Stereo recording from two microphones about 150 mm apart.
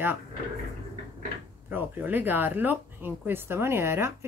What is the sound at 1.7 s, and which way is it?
Speech, 15° right (ahead or behind).